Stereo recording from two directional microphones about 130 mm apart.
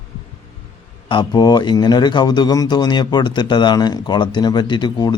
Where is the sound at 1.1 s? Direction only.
35° left (ahead or behind).